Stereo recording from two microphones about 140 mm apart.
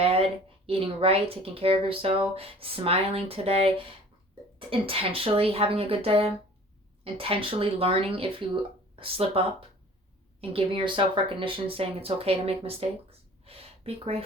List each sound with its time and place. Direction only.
0.0 s speech: 45° right (ahead or behind)